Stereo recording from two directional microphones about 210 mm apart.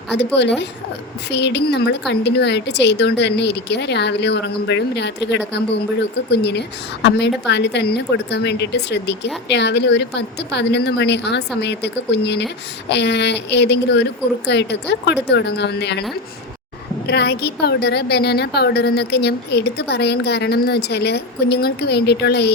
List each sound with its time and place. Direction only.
0.1 s a woman's voice: 55° left (ahead or behind)
1.3 s a woman's voice: 55° left (ahead or behind)
17.1 s a woman's voice: 50° left (ahead or behind)